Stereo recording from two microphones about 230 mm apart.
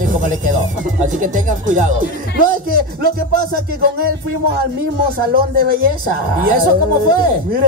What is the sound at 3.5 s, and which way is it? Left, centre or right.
Speech, right.